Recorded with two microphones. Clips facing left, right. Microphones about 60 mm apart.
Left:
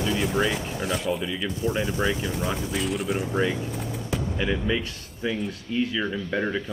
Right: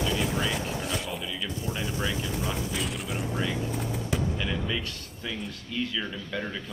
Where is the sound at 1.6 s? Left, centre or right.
Centre.